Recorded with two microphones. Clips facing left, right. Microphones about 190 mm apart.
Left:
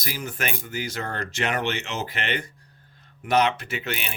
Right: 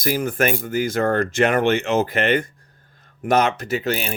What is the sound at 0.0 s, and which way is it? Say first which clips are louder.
Speech: right 11 dB; 50° right (ahead or behind).